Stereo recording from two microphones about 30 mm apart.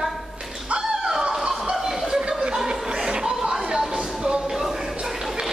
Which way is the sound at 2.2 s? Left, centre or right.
Right.